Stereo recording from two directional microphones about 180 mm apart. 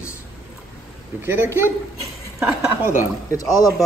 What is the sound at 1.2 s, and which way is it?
Speech, 15° right (ahead or behind).